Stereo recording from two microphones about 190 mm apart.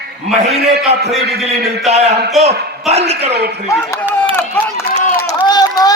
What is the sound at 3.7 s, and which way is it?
Speech, 15° left (ahead or behind).